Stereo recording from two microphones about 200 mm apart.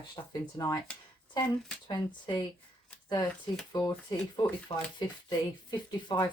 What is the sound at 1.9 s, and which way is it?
Speech, 20° left (ahead or behind).